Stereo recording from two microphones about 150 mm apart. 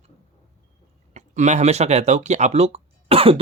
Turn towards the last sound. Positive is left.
turn(degrees=-40)  # may be behind; listen again after turning